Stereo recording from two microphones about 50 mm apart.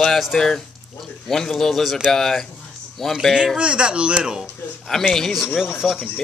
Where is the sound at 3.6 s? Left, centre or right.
Right.